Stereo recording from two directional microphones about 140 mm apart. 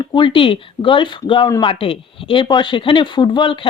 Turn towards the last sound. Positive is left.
turn(degrees=35)  # may be behind; listen again after turning